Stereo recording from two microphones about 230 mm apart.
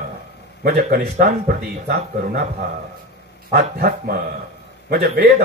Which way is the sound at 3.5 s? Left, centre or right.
Right.